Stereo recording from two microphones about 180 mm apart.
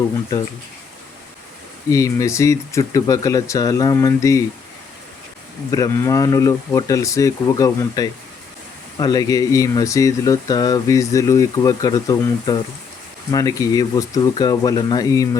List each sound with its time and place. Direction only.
1.9 s speech: 15° left (ahead or behind)
5.7 s speech: 20° left (ahead or behind)